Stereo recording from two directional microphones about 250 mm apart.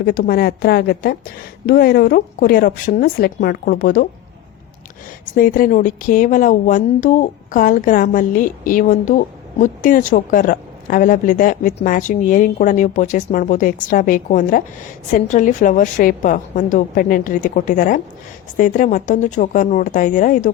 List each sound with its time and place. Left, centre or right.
0.0 s speech: left
5.3 s speech: left